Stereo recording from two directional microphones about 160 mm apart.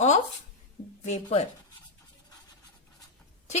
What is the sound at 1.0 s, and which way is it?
Speech, 45° left (ahead or behind).